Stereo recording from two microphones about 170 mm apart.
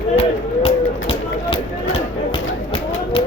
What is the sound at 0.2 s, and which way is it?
Run, 35° left (ahead or behind).